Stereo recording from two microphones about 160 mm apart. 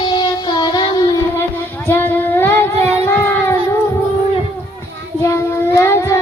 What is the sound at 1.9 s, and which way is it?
Child singing, 10° left (ahead or behind).